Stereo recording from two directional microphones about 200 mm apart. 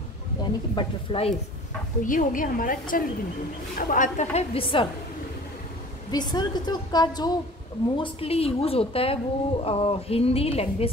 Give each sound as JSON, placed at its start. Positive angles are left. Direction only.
{"t": 0.4, "sound": "a woman's voice", "side_deg": 25}
{"t": 2.0, "sound": "a woman's voice", "side_deg": 40}
{"t": 6.1, "sound": "a woman's voice", "side_deg": 20}